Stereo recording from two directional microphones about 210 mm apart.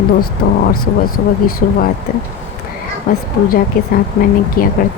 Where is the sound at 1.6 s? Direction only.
40° left (ahead or behind).